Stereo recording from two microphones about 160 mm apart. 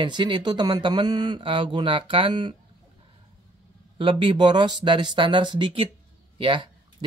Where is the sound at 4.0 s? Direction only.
30° right (ahead or behind).